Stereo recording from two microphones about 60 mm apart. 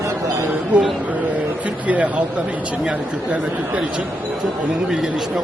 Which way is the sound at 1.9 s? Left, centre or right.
Right.